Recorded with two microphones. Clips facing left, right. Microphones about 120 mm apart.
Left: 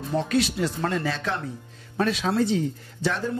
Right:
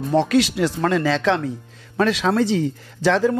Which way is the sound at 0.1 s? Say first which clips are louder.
Right 6 dB; 85° right.